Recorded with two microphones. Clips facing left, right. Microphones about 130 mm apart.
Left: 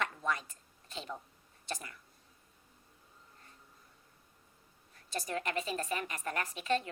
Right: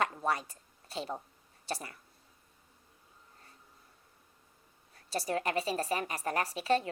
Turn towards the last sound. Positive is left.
turn(degrees=-35)  # may be behind; listen again after turning